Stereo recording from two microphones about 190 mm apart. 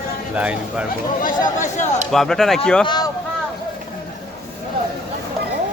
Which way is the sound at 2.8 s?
20° left (ahead or behind).